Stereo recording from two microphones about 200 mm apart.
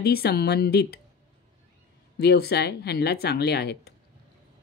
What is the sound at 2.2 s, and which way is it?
Speech, 55° left (ahead or behind).